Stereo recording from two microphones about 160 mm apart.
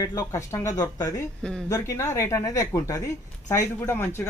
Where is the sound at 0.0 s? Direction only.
20° left (ahead or behind).